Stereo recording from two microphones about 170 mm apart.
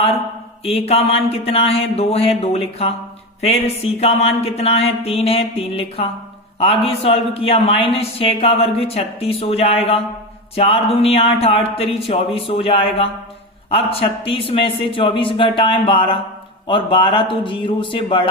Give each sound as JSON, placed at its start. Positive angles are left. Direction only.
{"t": 0.6, "sound": "speech", "side_deg": 35}
{"t": 4.0, "sound": "a man's voice", "side_deg": 35}